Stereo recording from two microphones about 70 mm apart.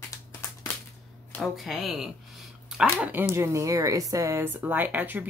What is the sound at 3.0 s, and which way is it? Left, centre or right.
Speech, right.